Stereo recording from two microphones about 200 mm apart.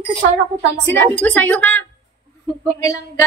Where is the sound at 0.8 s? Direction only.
10° left (ahead or behind).